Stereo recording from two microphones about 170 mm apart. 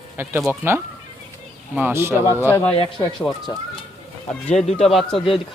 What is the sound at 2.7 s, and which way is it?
Speech, 35° left (ahead or behind).